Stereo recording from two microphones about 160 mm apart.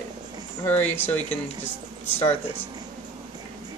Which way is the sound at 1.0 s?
10° left (ahead or behind).